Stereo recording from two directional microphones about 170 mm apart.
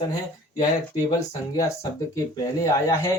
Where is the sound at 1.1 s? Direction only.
15° left (ahead or behind).